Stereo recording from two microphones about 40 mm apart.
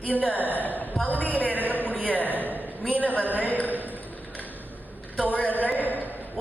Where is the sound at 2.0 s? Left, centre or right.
Left.